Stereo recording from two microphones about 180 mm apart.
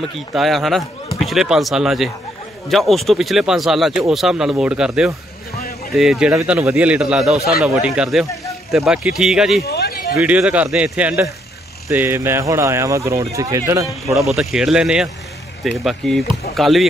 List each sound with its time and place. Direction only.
0.3 s a man's voice: centre (ahead or behind)
9.7 s a sound: 60° left (ahead or behind)
10.1 s speech: 10° right (ahead or behind)
14.2 s a man's voice: centre (ahead or behind)